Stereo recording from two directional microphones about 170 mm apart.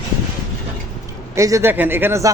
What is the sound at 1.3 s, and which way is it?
Speech, 20° right (ahead or behind).